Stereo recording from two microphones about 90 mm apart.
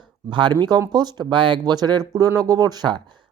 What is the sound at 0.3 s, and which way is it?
Speech, 65° right (ahead or behind).